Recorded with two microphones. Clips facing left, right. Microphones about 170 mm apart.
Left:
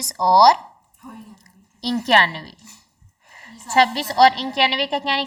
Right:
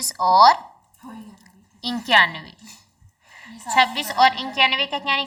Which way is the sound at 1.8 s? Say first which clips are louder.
Left 3 dB; 40° left (ahead or behind).